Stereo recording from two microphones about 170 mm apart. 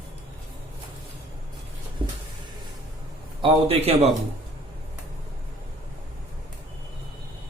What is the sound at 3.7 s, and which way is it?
Speech, 35° right (ahead or behind).